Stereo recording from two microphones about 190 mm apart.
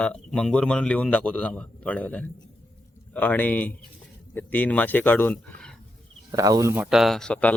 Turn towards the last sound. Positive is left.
turn(degrees=5)  # may be behind; listen again after turning